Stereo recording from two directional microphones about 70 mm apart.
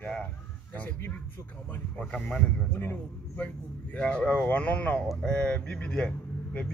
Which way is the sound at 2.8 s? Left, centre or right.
Left.